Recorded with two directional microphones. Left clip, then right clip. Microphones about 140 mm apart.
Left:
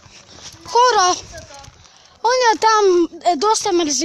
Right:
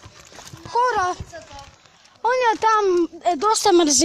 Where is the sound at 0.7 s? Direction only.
90° left.